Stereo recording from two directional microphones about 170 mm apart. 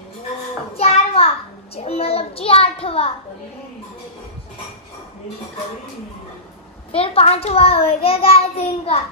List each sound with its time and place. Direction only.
0.7 s a sound: 35° left (ahead or behind)
1.8 s a child's voice: 35° left (ahead or behind)
6.9 s a child's voice: 35° left (ahead or behind)